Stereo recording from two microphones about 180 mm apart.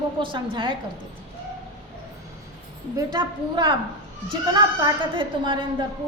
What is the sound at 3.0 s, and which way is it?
A woman's voice, 20° right (ahead or behind).